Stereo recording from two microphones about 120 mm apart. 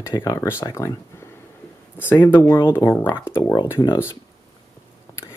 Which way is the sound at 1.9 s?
15° left (ahead or behind).